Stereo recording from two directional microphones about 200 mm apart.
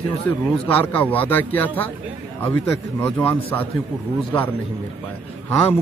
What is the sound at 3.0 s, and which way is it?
Speech, 10° left (ahead or behind).